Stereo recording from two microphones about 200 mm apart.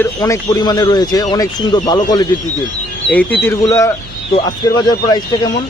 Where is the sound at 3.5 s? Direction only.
15° left (ahead or behind).